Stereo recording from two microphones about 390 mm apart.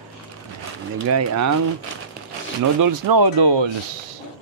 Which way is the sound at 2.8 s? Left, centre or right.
Right.